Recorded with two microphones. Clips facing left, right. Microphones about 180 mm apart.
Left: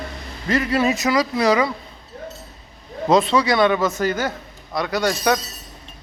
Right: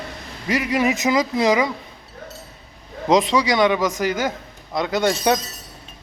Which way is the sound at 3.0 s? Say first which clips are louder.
Left 1 dB; 15° right (ahead or behind).